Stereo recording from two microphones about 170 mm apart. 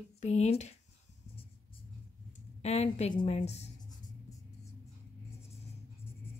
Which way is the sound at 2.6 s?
40° left (ahead or behind).